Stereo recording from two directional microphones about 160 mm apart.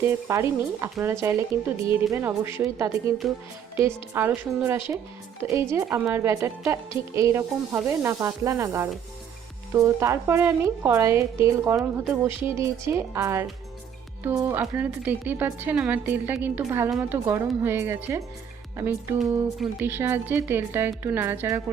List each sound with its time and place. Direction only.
0.0 s a woman's voice: 15° right (ahead or behind)
3.2 s speech: centre (ahead or behind)
3.8 s a woman's voice: 15° right (ahead or behind)